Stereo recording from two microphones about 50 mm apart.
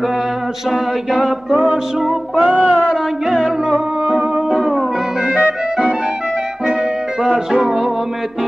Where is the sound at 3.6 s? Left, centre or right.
Right.